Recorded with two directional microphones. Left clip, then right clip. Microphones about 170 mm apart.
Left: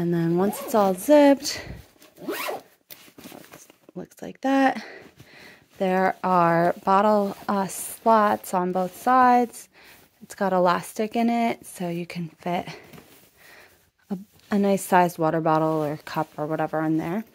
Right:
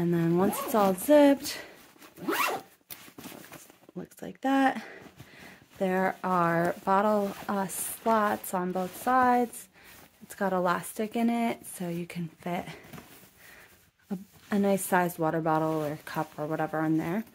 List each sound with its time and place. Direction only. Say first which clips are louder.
0.0 s speech: left 3 dB; 25° left (ahead or behind)
3.9 s speech: left 4 dB; 40° left (ahead or behind)
14.0 s speech: left 4 dB; 40° left (ahead or behind)